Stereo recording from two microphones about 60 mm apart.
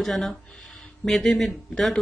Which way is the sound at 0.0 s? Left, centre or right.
Centre.